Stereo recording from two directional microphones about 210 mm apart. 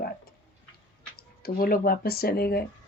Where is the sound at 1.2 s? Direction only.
45° left (ahead or behind).